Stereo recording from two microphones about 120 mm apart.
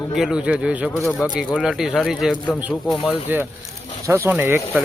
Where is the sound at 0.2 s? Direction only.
5° right (ahead or behind).